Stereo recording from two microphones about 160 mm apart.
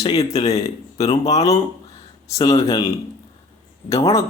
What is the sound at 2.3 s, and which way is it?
Speech, 20° left (ahead or behind).